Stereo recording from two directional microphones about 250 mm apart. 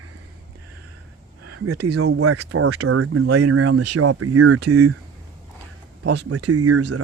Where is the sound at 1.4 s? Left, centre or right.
Right.